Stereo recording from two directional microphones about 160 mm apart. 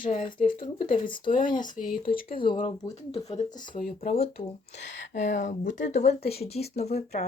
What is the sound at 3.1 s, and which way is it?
Speech, 40° left (ahead or behind).